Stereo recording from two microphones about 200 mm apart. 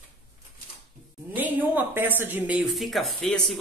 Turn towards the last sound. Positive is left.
turn(degrees=5)  # may be behind; listen again after turning